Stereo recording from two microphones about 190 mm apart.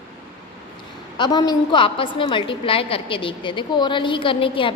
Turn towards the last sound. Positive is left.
turn(degrees=25)  # may be behind; listen again after turning